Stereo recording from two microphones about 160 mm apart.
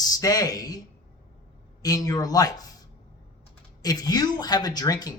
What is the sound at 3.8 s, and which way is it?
A man's voice, 25° left (ahead or behind).